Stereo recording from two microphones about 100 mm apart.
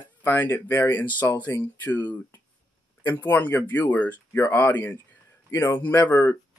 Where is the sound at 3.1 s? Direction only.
20° left (ahead or behind).